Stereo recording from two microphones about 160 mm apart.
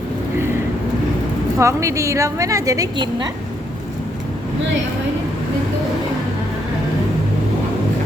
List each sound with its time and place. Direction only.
1.5 s a woman's voice: 20° right (ahead or behind)